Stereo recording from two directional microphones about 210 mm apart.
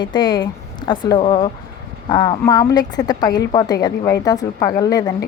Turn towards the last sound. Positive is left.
turn(degrees=15)  # may be behind; listen again after turning